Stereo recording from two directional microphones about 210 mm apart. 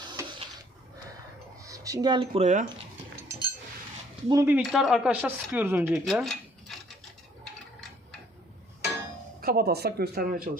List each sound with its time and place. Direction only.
0.0 s a sound: 20° right (ahead or behind)
1.6 s speech: 15° right (ahead or behind)
2.4 s speech: 35° right (ahead or behind)
4.3 s speech: 15° right (ahead or behind)
4.6 s speech: centre (ahead or behind)
9.4 s speech: 45° right (ahead or behind)